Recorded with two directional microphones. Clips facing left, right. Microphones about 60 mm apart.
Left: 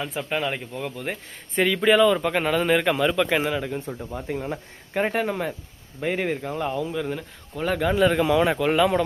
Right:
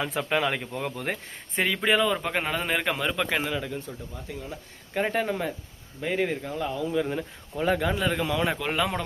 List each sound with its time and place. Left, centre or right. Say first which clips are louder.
0.0 s speech: right 1 dB; right
1.5 s a man's voice: left 5 dB; centre
4.1 s speech: left 11 dB; left
5.1 s speech: left 2 dB; centre
6.5 s speech: left 3 dB; left
6.9 s a man's voice: right 1 dB; centre
8.2 s a man's voice: left 7 dB; centre
8.4 s a man's voice: left 7 dB; centre